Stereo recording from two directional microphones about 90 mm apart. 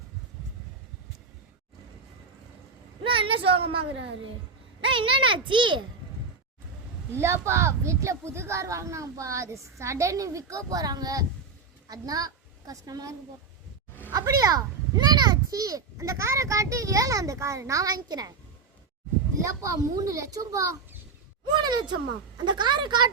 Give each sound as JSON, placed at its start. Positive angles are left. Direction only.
{"t": 3.0, "sound": "speech", "side_deg": -80}
{"t": 4.8, "sound": "a sound", "side_deg": -75}
{"t": 5.5, "sound": "a woman's voice", "side_deg": -60}
{"t": 7.1, "sound": "a child's voice", "side_deg": -30}
{"t": 19.4, "sound": "a child's voice", "side_deg": -40}
{"t": 21.5, "sound": "a woman's voice", "side_deg": -55}